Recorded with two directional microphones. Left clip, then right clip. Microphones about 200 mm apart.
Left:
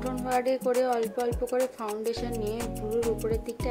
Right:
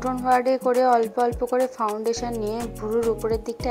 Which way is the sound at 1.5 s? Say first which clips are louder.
Right 6 dB; centre (ahead or behind).